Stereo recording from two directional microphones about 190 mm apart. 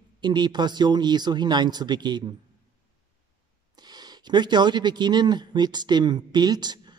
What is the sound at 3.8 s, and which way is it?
Speech, 20° right (ahead or behind).